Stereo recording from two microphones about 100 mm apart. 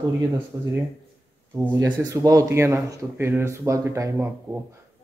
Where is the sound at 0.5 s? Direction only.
30° right (ahead or behind).